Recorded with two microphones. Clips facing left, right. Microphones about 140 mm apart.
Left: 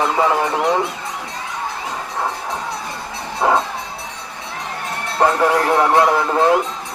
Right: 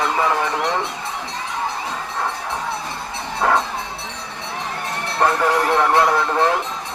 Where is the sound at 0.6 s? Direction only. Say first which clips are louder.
Left 4 dB; 5° left (ahead or behind).